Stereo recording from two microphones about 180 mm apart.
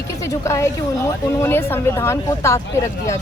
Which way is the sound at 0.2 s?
15° left (ahead or behind).